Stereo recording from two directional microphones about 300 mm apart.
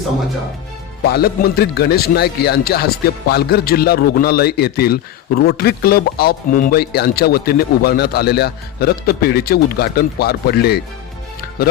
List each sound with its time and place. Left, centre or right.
1.1 s speech: left